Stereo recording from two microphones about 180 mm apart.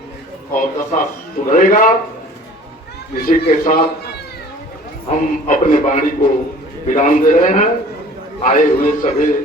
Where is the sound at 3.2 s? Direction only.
50° left (ahead or behind).